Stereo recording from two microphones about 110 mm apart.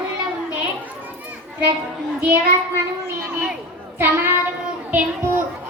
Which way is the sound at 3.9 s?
20° right (ahead or behind).